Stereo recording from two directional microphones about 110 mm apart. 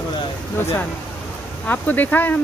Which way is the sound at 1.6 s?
15° left (ahead or behind).